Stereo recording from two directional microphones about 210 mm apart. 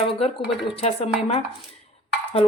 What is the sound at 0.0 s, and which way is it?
Speech, 30° left (ahead or behind).